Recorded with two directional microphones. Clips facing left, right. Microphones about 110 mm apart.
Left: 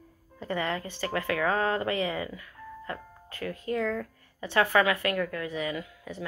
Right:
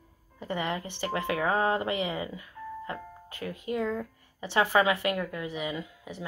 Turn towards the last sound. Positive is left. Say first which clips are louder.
# left 1 dB
turn(degrees=-20)  # may be behind; listen again after turning